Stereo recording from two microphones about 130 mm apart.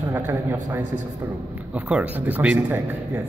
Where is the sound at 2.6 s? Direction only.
25° right (ahead or behind).